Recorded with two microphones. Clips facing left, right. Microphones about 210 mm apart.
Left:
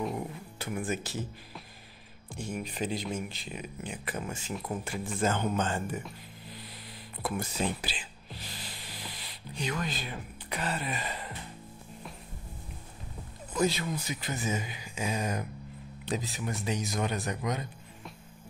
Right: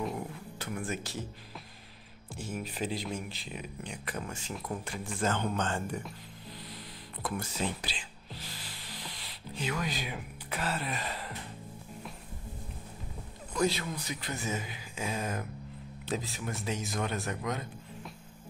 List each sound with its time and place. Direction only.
0.0 s music: 5° left (ahead or behind)
2.3 s speech: 5° right (ahead or behind)
7.2 s speech: 10° left (ahead or behind)
8.4 s spray: 20° left (ahead or behind)
8.9 s speech: 5° left (ahead or behind)
13.5 s speech: centre (ahead or behind)